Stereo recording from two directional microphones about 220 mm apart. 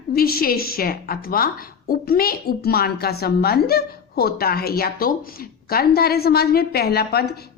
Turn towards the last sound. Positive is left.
turn(degrees=45)  # may be behind; listen again after turning